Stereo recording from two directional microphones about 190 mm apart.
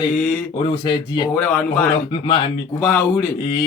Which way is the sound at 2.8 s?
10° left (ahead or behind).